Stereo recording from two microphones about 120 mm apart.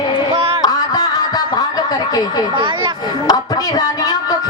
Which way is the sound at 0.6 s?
30° left (ahead or behind).